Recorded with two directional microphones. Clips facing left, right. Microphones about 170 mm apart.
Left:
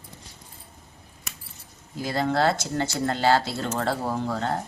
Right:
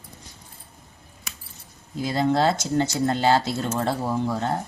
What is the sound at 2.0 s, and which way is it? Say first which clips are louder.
Speech: right 2 dB; 20° right (ahead or behind).